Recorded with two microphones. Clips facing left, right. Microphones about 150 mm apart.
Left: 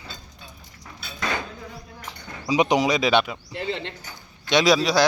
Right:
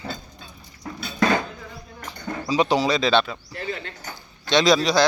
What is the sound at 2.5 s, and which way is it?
Speech, 15° left (ahead or behind).